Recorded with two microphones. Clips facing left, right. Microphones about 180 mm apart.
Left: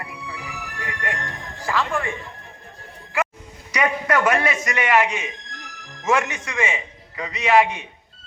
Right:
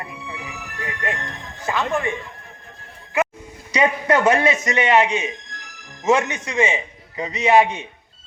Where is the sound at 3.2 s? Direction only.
20° right (ahead or behind).